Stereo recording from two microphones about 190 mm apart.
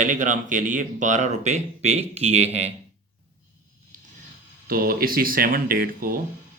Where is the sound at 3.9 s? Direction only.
40° right (ahead or behind).